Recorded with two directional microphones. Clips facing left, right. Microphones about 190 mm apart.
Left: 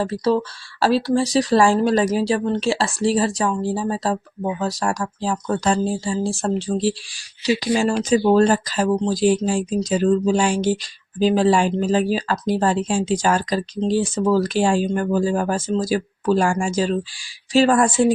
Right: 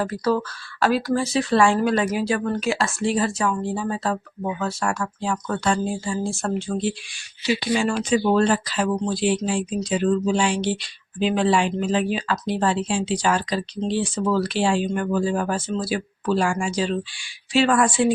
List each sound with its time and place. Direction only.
0.0 s speech: 30° left (ahead or behind)